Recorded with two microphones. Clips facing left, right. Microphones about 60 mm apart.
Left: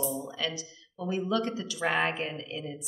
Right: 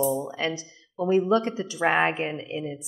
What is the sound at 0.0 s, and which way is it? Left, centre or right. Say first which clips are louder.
A woman's voice: right 7 dB; right.